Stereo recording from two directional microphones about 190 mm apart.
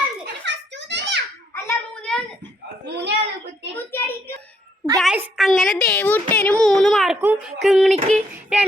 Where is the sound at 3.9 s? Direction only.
15° left (ahead or behind).